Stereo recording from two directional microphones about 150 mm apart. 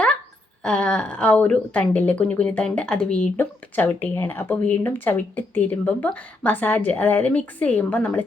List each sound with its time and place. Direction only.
0.6 s a woman's voice: 5° left (ahead or behind)